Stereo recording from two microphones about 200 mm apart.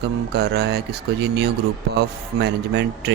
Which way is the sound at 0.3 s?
55° right (ahead or behind).